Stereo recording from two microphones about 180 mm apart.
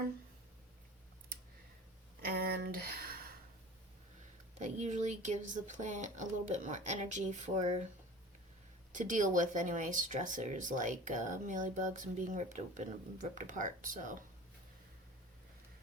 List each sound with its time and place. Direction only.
2.2 s a sound: 60° right (ahead or behind)
4.6 s speech: 40° right (ahead or behind)
8.9 s speech: 45° right (ahead or behind)